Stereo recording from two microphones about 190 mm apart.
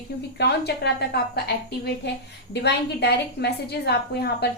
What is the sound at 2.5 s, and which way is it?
A woman's voice, 60° left (ahead or behind).